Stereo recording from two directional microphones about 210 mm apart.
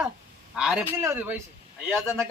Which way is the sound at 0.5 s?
Centre (ahead or behind).